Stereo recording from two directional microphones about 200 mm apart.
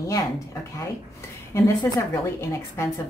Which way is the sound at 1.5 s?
15° left (ahead or behind).